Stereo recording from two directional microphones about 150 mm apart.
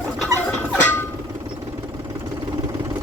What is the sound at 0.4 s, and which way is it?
Fowl, 10° left (ahead or behind).